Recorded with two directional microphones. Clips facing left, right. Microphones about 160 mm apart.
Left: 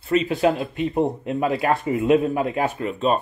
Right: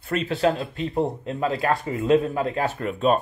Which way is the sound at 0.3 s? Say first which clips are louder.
Left 2 dB; 15° left (ahead or behind).